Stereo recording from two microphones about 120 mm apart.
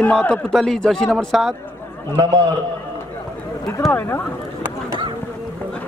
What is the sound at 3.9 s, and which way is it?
Speech, 20° left (ahead or behind).